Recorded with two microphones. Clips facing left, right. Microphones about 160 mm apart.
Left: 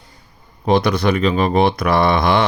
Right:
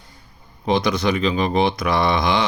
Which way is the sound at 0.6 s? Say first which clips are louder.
Left 4 dB; 60° left (ahead or behind).